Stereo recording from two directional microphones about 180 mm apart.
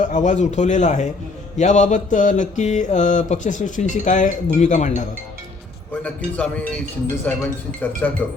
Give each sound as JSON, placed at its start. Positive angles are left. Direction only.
{"t": 0.0, "sound": "speech", "side_deg": 45}
{"t": 1.5, "sound": "mantra", "side_deg": 40}
{"t": 6.0, "sound": "a man's voice", "side_deg": 10}